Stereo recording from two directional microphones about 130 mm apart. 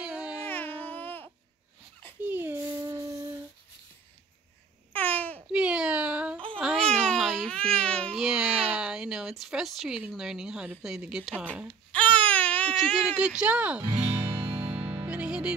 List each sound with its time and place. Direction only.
0.0 s a sound: 10° right (ahead or behind)
0.5 s a sound: 15° left (ahead or behind)
2.2 s a sound: 15° right (ahead or behind)
4.9 s babbling: 10° left (ahead or behind)
5.5 s cat: 5° right (ahead or behind)
6.6 s baby cry: centre (ahead or behind)
8.2 s baby cry: 5° right (ahead or behind)
8.7 s speech: 5° right (ahead or behind)
11.9 s baby cry: 10° left (ahead or behind)
12.9 s speech: 10° right (ahead or behind)
13.8 s music: 45° right (ahead or behind)
15.0 s music: 10° right (ahead or behind)